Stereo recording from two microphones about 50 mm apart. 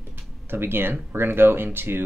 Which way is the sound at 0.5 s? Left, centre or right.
Right.